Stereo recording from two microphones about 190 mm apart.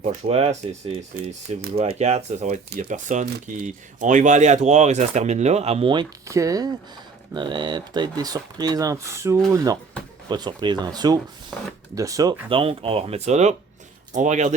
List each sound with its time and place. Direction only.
0.0 s speech: 30° right (ahead or behind)
1.7 s speech: 35° right (ahead or behind)